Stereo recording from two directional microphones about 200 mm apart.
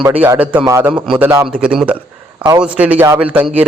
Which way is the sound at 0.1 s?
10° right (ahead or behind).